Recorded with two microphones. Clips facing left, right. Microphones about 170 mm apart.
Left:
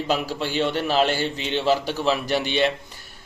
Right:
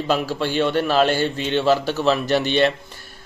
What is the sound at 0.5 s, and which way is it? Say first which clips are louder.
Speech: right 3 dB; 55° right (ahead or behind).